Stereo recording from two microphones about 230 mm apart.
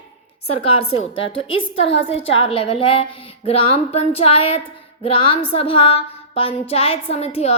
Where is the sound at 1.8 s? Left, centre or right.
Left.